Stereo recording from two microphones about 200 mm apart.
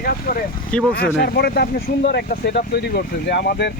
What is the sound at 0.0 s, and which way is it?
Speech, 45° left (ahead or behind).